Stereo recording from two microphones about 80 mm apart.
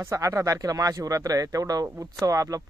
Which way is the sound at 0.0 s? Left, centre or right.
Right.